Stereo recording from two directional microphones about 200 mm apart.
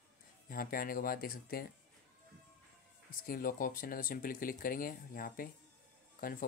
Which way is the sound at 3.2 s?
45° left (ahead or behind).